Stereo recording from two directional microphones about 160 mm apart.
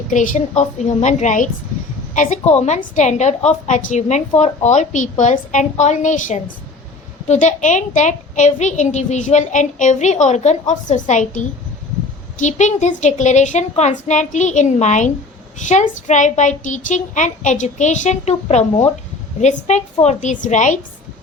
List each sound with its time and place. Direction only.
0.1 s a woman's voice: 50° left (ahead or behind)
2.1 s a sound: 50° left (ahead or behind)
2.6 s a woman's voice: 45° left (ahead or behind)